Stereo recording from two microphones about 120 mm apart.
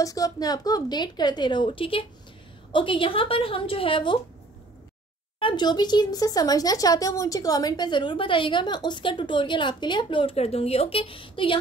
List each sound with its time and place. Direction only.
0.0 s speech: 30° left (ahead or behind)
5.4 s speech: 40° left (ahead or behind)